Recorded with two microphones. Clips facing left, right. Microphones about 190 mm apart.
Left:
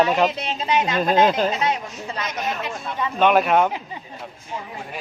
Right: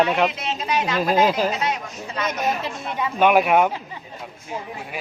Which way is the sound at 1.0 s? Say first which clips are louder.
Even; 5° right (ahead or behind).